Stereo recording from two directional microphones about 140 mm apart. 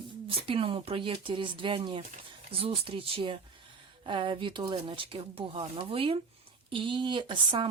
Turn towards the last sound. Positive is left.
turn(degrees=-35)  # may be behind; listen again after turning